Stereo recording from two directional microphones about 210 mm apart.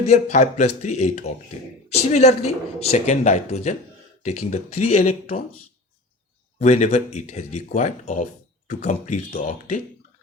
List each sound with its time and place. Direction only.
0.1 s speech: 35° left (ahead or behind)
6.6 s speech: 35° left (ahead or behind)